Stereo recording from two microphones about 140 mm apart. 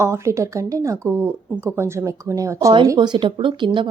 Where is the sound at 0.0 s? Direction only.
20° right (ahead or behind).